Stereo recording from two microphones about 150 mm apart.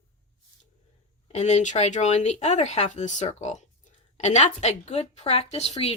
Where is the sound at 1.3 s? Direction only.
50° left (ahead or behind).